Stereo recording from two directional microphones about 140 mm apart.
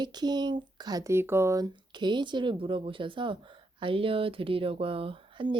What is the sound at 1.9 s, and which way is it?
A woman's voice, 35° right (ahead or behind).